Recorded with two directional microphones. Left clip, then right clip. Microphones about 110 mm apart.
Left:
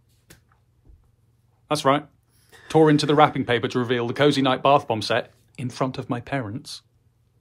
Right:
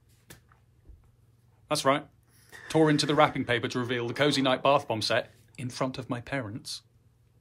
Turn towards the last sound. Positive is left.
turn(degrees=20)  # may be behind; listen again after turning